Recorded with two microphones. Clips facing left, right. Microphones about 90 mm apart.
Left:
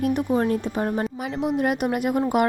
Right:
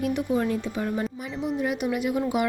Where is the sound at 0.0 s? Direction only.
45° left (ahead or behind).